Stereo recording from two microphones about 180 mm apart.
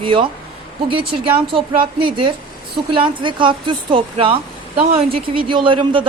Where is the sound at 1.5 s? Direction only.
30° right (ahead or behind).